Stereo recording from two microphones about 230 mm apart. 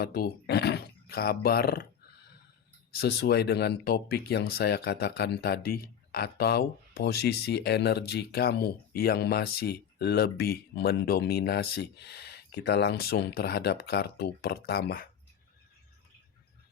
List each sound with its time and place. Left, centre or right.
0.0 s speech: left
2.9 s speech: left